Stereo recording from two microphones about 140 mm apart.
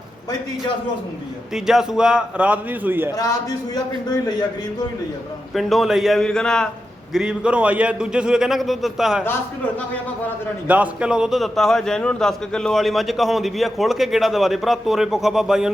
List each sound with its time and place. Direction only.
1.5 s a man's voice: 5° right (ahead or behind)
3.1 s a man's voice: 25° left (ahead or behind)
5.5 s a man's voice: centre (ahead or behind)
7.1 s a man's voice: 5° right (ahead or behind)
10.7 s a man's voice: 10° right (ahead or behind)